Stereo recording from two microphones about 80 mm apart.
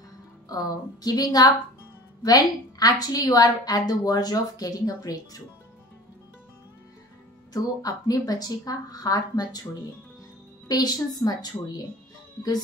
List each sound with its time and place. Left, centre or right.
0.5 s a woman's voice: left
7.5 s a woman's voice: left
10.7 s a woman's voice: left